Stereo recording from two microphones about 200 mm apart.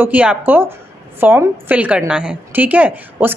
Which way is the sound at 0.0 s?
5° right (ahead or behind).